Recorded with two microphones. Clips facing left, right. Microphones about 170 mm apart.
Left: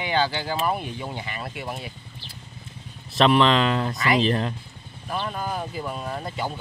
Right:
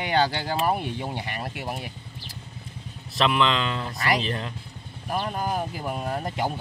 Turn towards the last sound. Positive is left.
turn(degrees=-50)  # may be behind; listen again after turning